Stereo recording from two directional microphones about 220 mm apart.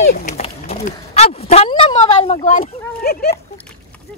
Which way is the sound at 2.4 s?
40° left (ahead or behind).